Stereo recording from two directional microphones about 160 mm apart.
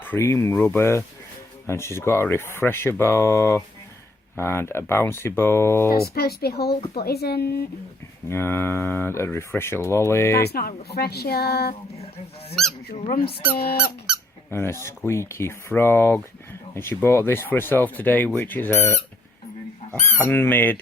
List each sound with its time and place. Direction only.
0.0 s speech: 15° left (ahead or behind)
5.9 s speech: 75° left (ahead or behind)
8.3 s speech: 15° left (ahead or behind)
10.4 s speech: 75° left (ahead or behind)
12.9 s speech: 60° left (ahead or behind)
14.5 s speech: 15° left (ahead or behind)
20.1 s speech: 15° left (ahead or behind)